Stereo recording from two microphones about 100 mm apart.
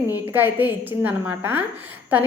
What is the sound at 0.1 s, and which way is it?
A woman's voice, 20° right (ahead or behind).